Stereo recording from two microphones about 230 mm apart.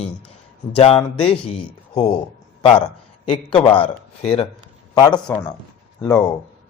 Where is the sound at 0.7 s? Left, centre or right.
Left.